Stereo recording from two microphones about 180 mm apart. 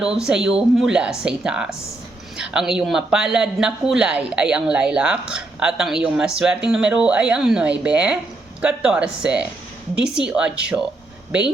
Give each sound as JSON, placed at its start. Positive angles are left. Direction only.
{"t": 0.0, "sound": "speech", "side_deg": -5}